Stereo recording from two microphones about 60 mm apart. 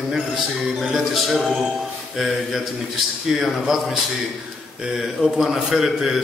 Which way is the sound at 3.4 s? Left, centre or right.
Centre.